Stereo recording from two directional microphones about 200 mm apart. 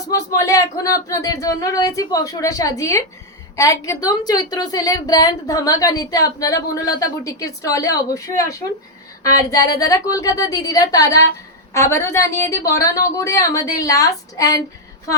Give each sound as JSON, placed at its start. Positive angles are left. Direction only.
{"t": 0.1, "sound": "speech", "side_deg": 15}